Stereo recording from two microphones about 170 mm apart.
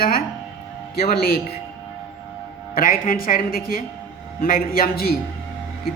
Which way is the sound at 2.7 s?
55° left (ahead or behind).